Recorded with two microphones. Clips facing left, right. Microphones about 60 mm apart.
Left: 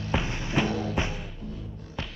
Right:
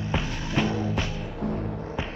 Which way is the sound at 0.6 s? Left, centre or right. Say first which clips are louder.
Right 2 dB; right.